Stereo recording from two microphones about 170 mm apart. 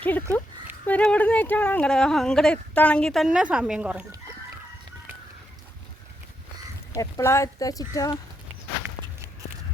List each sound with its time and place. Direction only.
0.0 s speech: 10° left (ahead or behind); by 4.0 s 5° right (ahead or behind)
6.9 s speech: 15° left (ahead or behind)